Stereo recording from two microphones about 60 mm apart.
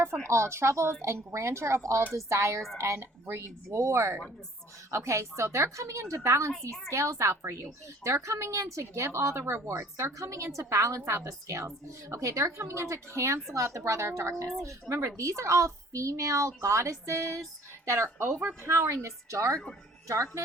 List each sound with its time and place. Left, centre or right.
0.0 s a woman's voice: right
17.8 s a woman's voice: right